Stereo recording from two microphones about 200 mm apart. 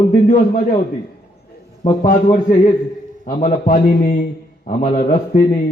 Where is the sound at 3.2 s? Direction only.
45° left (ahead or behind).